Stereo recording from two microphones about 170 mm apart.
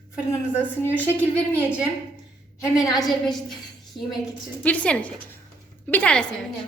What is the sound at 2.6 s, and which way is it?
Speech, 25° left (ahead or behind).